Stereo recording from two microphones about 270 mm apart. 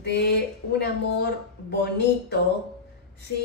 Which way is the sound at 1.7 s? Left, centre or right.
Left.